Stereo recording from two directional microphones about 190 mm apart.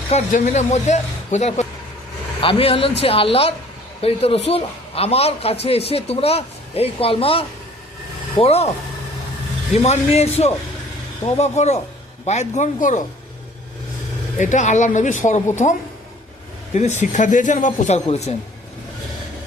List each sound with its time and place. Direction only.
0.1 s a man's voice: 40° left (ahead or behind)
9.8 s speech: 35° left (ahead or behind)
14.3 s speech: 40° left (ahead or behind)
16.7 s speech: 40° left (ahead or behind)